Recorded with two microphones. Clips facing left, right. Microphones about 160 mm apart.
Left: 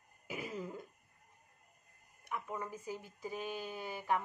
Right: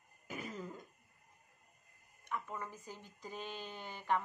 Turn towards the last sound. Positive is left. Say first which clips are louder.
# left 1 dB
turn(degrees=10)  # may be behind; listen again after turning